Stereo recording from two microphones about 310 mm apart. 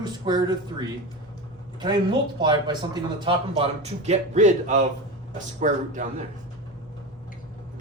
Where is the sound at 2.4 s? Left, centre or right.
Centre.